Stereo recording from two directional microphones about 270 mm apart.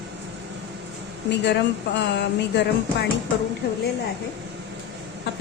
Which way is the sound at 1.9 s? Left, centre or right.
Left.